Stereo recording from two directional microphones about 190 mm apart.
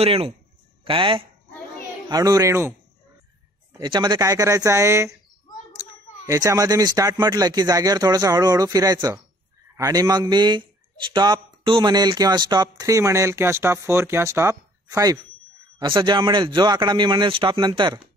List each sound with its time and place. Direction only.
0.0 s speech: 30° right (ahead or behind); by 2.7 s 15° right (ahead or behind)
3.7 s speech: 20° right (ahead or behind)